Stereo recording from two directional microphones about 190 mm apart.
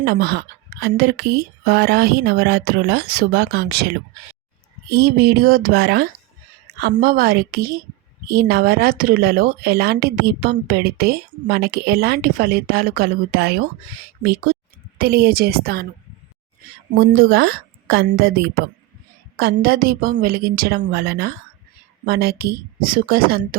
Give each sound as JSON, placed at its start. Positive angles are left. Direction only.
{"t": 0.0, "sound": "speech", "side_deg": -55}
{"t": 14.5, "sound": "a sound", "side_deg": -50}
{"t": 14.9, "sound": "speech", "side_deg": -55}
{"t": 17.2, "sound": "speech", "side_deg": -60}